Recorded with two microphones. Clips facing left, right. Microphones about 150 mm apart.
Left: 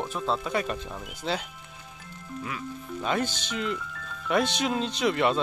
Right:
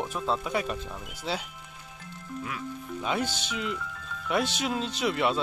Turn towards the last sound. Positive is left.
turn(degrees=-5)  # may be behind; listen again after turning